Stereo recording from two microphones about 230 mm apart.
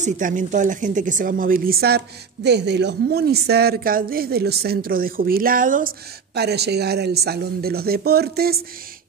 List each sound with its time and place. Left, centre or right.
0.0 s speech: right